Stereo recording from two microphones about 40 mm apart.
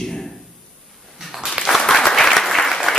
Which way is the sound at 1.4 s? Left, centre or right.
Centre.